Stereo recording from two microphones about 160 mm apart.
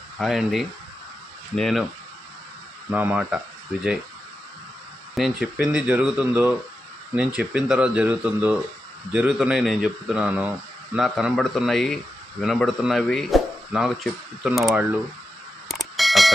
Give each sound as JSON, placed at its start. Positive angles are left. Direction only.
{"t": 0.2, "sound": "speech", "side_deg": 0}
{"t": 2.9, "sound": "speech", "side_deg": -10}
{"t": 5.1, "sound": "speech", "side_deg": -5}
{"t": 15.7, "sound": "fire alarm", "side_deg": 0}